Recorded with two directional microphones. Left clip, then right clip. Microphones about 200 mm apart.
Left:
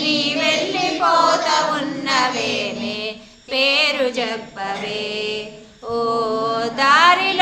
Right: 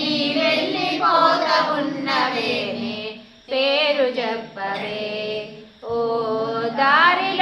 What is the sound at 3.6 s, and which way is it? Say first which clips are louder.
Female singing: left 1 dB; 45° left (ahead or behind).